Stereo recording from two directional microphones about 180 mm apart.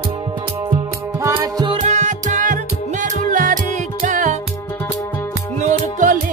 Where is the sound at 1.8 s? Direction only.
40° right (ahead or behind).